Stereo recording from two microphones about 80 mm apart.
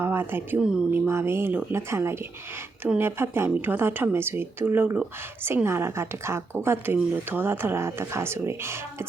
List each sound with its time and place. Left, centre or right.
0.0 s speech: right
0.6 s speech: centre
0.9 s a woman's voice: right